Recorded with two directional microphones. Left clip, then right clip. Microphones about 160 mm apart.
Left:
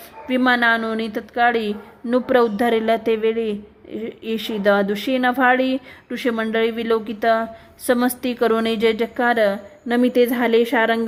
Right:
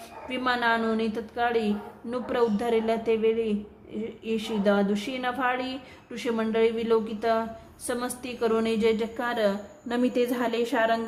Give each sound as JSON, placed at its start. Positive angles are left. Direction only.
{"t": 0.3, "sound": "speech", "side_deg": 40}